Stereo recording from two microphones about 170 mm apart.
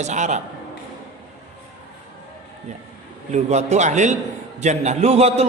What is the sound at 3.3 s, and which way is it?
A man's voice, 45° right (ahead or behind).